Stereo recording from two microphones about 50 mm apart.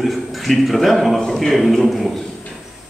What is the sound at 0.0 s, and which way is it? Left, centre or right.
A man's voice, centre.